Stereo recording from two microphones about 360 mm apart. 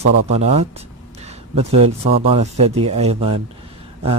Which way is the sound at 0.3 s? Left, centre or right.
Centre.